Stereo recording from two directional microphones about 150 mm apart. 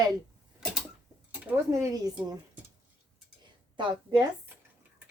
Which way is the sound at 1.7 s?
20° right (ahead or behind).